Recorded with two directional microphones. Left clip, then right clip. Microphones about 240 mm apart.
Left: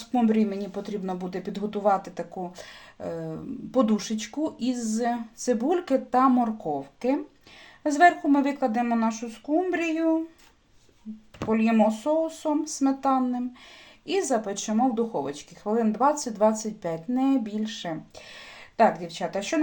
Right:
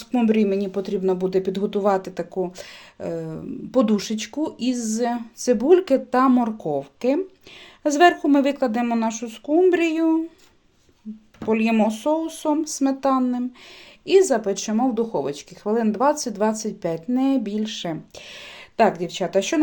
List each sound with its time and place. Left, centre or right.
0.1 s a woman's voice: right
11.4 s speech: right